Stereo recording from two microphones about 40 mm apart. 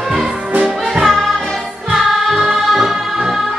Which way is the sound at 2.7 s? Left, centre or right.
Centre.